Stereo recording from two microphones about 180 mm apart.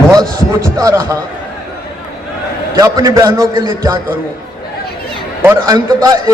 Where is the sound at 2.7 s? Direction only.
20° right (ahead or behind).